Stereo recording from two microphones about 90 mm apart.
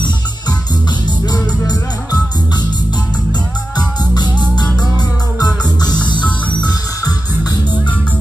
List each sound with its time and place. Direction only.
3.7 s music: 50° left (ahead or behind)